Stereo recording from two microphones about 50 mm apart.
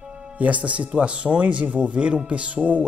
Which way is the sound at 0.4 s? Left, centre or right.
Right.